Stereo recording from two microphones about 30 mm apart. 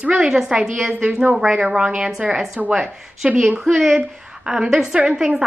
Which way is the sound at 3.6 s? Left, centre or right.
Centre.